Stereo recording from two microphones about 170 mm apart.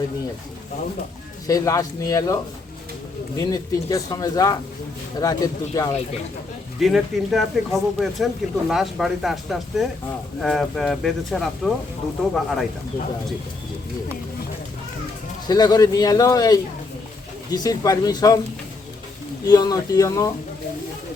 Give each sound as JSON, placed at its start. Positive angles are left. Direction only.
{"t": 1.5, "sound": "speech", "side_deg": 20}
{"t": 6.7, "sound": "speech", "side_deg": 0}
{"t": 15.4, "sound": "speech", "side_deg": 25}
{"t": 19.5, "sound": "speech", "side_deg": 20}